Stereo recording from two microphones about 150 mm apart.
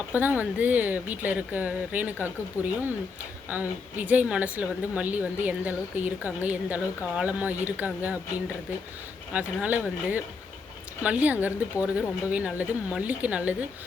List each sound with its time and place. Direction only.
0.1 s a woman's voice: 10° right (ahead or behind)
2.6 s speech: 20° left (ahead or behind)
3.5 s a woman's voice: 10° right (ahead or behind)
9.3 s a woman's voice: 10° right (ahead or behind)